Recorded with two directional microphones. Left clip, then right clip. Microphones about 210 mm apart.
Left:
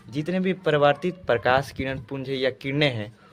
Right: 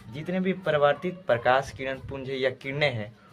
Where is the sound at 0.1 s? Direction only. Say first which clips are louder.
Left 3 dB; 55° left (ahead or behind).